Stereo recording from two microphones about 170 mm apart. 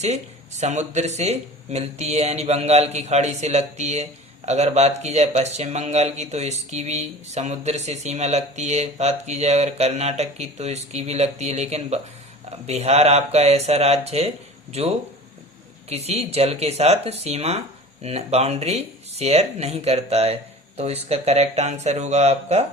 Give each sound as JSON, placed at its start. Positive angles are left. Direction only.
{"t": 0.0, "sound": "speech", "side_deg": -40}